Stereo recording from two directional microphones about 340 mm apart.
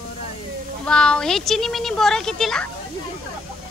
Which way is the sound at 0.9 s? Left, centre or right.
Centre.